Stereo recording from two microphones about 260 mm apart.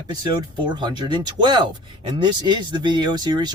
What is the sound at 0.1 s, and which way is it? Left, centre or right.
Speech, centre.